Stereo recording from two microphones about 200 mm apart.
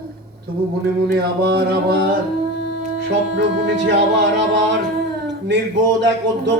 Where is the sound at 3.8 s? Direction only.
60° right (ahead or behind).